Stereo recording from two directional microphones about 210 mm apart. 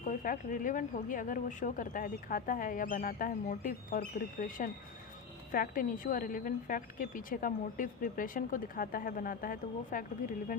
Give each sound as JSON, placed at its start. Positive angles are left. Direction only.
{"t": 0.0, "sound": "speech", "side_deg": 35}